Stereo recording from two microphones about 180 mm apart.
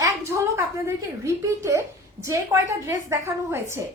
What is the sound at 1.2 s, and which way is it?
A woman's voice, 15° right (ahead or behind).